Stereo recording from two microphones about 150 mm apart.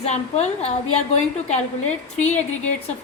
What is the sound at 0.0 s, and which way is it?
A woman's voice, 45° left (ahead or behind).